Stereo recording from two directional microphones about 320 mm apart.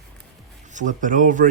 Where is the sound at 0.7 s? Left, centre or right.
Right.